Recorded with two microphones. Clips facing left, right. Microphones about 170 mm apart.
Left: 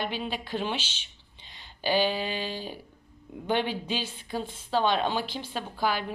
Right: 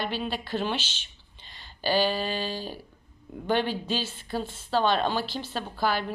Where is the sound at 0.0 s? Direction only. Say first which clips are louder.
Right 1 dB; 15° left (ahead or behind).